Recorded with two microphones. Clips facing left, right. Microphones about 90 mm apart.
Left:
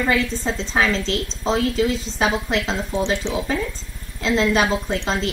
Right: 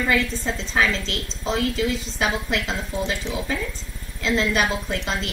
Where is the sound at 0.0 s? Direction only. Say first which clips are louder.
Left 2 dB; 30° left (ahead or behind).